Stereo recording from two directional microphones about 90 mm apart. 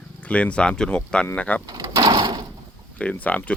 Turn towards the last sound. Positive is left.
turn(degrees=15)  # may be behind; listen again after turning